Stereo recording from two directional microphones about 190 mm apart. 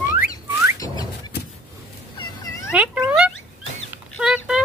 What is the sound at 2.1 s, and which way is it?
Cat, 20° left (ahead or behind).